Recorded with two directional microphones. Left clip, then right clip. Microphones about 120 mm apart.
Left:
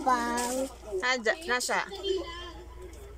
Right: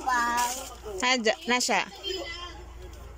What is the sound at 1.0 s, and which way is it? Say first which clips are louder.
Speech: right 3 dB; 15° right (ahead or behind).